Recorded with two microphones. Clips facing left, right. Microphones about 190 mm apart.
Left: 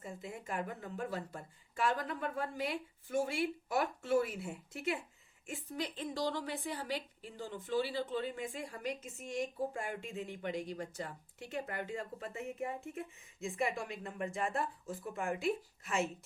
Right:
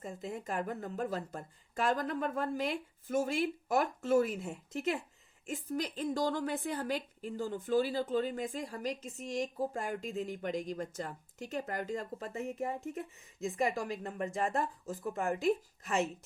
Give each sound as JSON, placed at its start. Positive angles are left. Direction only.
{"t": 0.0, "sound": "a woman's voice", "side_deg": -40}